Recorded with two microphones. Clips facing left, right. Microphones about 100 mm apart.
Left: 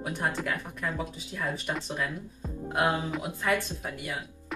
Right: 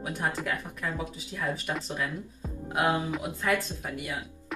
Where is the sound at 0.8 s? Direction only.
15° left (ahead or behind).